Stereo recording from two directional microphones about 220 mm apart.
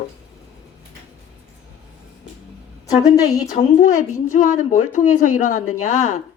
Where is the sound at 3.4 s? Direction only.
35° left (ahead or behind).